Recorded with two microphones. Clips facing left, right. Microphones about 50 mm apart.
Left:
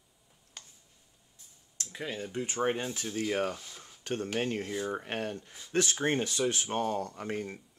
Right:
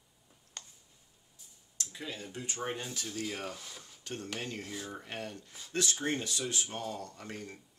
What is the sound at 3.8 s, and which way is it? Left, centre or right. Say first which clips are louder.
Dishes: left 10 dB; left.